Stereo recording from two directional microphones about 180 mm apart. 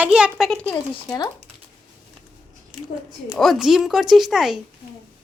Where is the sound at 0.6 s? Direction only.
10° left (ahead or behind).